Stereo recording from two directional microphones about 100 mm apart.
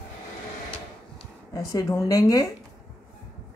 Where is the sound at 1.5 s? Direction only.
35° left (ahead or behind).